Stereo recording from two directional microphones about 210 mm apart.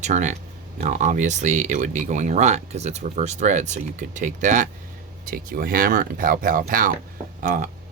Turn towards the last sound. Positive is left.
turn(degrees=-40)  # may be behind; listen again after turning